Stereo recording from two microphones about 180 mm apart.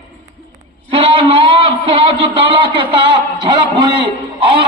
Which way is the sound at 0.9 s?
30° right (ahead or behind).